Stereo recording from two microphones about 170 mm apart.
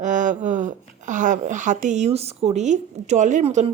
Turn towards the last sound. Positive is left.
turn(degrees=-45)  # may be behind; listen again after turning